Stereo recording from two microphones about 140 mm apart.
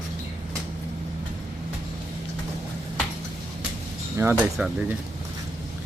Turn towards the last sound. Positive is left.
turn(degrees=-5)  # may be behind; listen again after turning